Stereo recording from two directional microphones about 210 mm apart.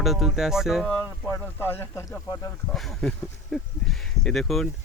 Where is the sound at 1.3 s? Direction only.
10° left (ahead or behind).